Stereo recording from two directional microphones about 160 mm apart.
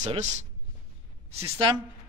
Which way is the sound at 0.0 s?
50° right (ahead or behind).